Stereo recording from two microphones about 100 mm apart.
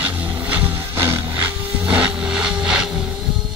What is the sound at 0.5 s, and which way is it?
Music, 25° right (ahead or behind).